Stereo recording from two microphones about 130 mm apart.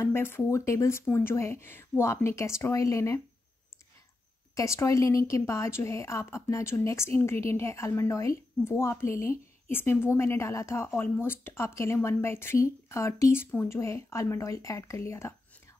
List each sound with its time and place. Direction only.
0.0 s a woman's voice: 20° left (ahead or behind)
4.6 s a woman's voice: 25° left (ahead or behind)